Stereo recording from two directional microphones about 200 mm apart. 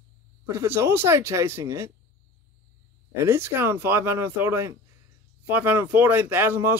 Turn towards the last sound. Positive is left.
turn(degrees=-10)  # may be behind; listen again after turning